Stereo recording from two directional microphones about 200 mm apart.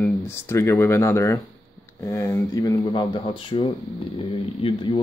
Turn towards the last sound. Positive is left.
turn(degrees=25)  # may be behind; listen again after turning